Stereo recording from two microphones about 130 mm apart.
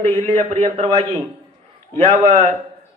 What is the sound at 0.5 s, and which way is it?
A man's voice, 50° right (ahead or behind).